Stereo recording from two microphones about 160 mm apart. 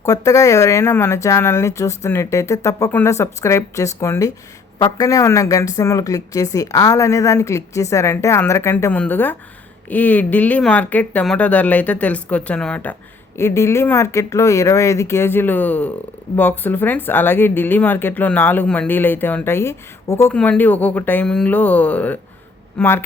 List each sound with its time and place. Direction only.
0.0 s a woman's voice: 20° left (ahead or behind)